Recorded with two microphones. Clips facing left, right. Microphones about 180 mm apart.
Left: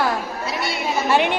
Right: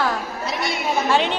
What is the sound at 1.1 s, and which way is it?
Speech, 10° left (ahead or behind).